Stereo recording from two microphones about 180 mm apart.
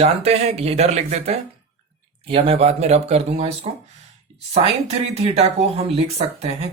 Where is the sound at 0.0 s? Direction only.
35° right (ahead or behind).